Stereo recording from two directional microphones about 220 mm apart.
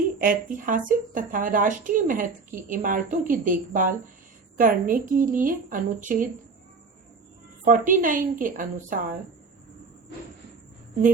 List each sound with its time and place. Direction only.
0.2 s a woman's voice: 40° right (ahead or behind)
7.6 s a woman's voice: 40° right (ahead or behind)